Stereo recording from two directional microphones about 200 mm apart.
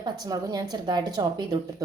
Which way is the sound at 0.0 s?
20° right (ahead or behind).